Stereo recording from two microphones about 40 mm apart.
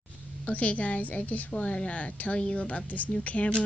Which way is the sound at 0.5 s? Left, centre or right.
Left.